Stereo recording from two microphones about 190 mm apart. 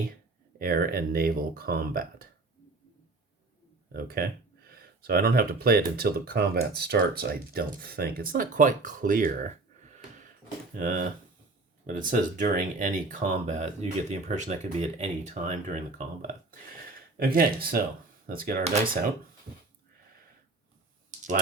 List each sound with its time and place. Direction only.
0.6 s speech: 50° right (ahead or behind)
3.9 s speech: 50° right (ahead or behind)
10.8 s speech: 45° right (ahead or behind)
17.2 s speech: 50° right (ahead or behind)
18.6 s speech: 35° right (ahead or behind)